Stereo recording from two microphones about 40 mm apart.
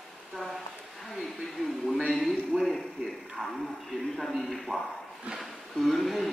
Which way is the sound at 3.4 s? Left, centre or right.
Right.